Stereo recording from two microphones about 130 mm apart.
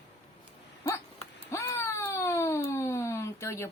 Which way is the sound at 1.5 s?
20° left (ahead or behind).